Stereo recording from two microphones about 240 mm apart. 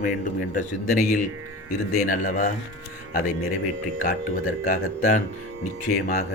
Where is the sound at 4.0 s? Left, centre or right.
Left.